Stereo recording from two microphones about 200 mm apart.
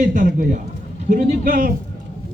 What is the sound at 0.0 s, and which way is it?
A man's voice, 45° right (ahead or behind).